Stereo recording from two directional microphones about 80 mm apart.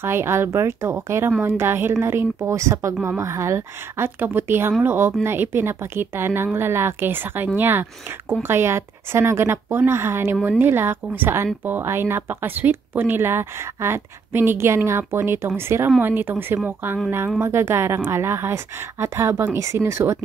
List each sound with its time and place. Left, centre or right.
0.0 s a woman's voice: right